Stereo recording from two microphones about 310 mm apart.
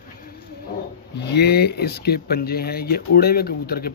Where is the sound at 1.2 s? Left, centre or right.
Left.